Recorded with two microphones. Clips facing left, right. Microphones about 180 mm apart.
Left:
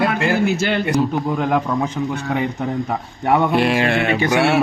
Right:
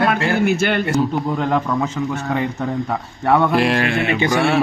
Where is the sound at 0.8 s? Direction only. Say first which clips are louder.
Even; 10° left (ahead or behind).